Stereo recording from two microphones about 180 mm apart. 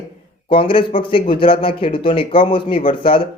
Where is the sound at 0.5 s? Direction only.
30° left (ahead or behind).